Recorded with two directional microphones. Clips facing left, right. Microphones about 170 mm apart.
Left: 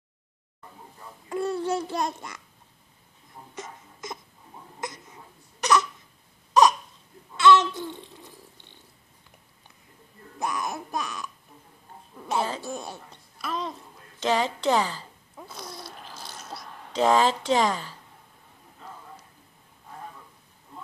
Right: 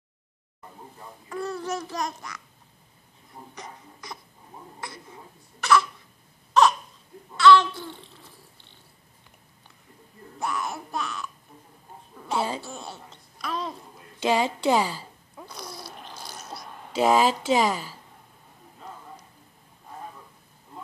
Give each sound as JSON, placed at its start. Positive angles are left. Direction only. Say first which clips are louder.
{"t": 1.3, "sound": "babbling", "louder": "left 4 dB", "side_deg": 30}
{"t": 3.5, "sound": "babbling", "louder": "left 5 dB", "side_deg": 20}
{"t": 5.6, "sound": "crying", "louder": "right 1 dB", "side_deg": 20}
{"t": 7.3, "sound": "babbling", "louder": "right 1 dB", "side_deg": 20}
{"t": 10.4, "sound": "speech", "louder": "even", "side_deg": 15}
{"t": 12.4, "sound": "speech", "louder": "even", "side_deg": -10}
{"t": 12.6, "sound": "speech", "louder": "left 4 dB", "side_deg": 15}
{"t": 13.5, "sound": "a child's voice", "louder": "even", "side_deg": 0}
{"t": 14.2, "sound": "speech", "louder": "right 1 dB", "side_deg": -10}
{"t": 15.3, "sound": "a sound", "louder": "even", "side_deg": 0}
{"t": 16.9, "sound": "speech", "louder": "right 1 dB", "side_deg": -10}